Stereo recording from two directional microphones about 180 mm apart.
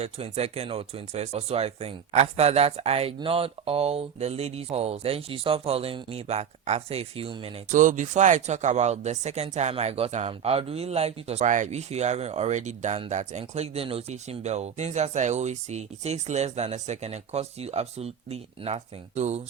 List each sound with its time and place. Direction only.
0.0 s speech: 35° right (ahead or behind)
7.7 s speech: 45° right (ahead or behind)